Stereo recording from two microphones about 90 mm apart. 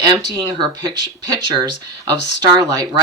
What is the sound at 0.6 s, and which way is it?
Speech, 55° right (ahead or behind).